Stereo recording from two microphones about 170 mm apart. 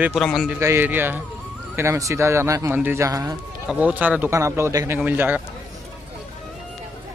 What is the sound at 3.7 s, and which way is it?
Speech, 10° right (ahead or behind).